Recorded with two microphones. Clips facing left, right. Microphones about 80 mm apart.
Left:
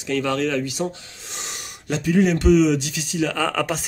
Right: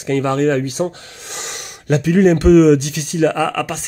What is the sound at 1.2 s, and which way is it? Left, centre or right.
Snort, right.